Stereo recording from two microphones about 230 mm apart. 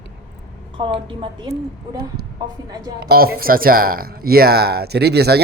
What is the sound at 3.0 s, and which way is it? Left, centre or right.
Speech, right.